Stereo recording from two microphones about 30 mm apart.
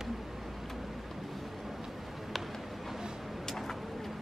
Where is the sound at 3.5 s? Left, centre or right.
Centre.